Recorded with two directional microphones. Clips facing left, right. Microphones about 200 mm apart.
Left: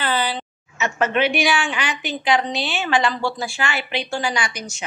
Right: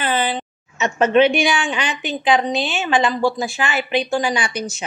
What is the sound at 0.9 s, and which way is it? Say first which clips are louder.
A woman's voice: right 6 dB; 25° right (ahead or behind).